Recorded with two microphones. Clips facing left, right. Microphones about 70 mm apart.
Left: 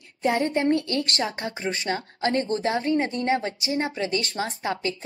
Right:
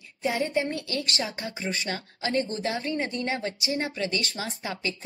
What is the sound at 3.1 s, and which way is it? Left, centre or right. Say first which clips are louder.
Speech: left 5 dB; left.